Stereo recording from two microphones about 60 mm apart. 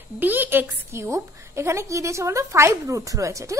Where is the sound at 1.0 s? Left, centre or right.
Right.